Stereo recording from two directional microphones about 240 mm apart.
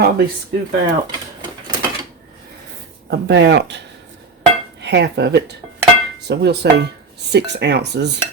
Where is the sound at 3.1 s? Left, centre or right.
Right.